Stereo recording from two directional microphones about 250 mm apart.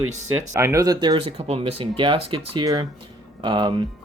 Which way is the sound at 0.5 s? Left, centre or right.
Centre.